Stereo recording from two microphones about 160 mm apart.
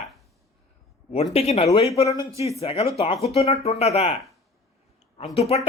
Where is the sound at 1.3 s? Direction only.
40° left (ahead or behind).